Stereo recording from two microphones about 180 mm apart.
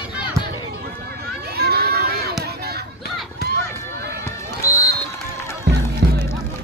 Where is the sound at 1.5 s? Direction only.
60° right (ahead or behind).